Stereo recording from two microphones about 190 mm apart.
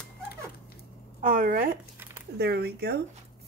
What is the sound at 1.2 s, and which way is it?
Speech, 45° right (ahead or behind).